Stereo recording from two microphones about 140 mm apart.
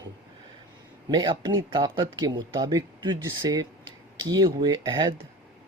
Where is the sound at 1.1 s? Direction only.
35° right (ahead or behind).